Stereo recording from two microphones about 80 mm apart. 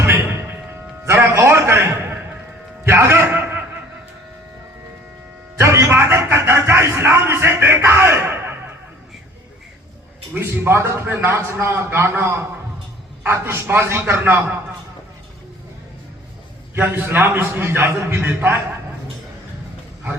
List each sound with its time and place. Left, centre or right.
1.0 s a man's voice: right
5.5 s a sound: right
10.3 s a man's voice: right
16.7 s a man's voice: right